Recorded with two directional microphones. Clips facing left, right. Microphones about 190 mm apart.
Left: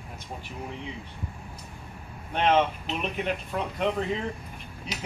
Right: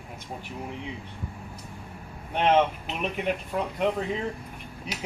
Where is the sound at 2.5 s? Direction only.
10° right (ahead or behind).